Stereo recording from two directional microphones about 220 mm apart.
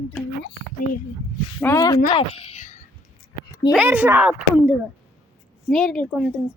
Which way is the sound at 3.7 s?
5° right (ahead or behind).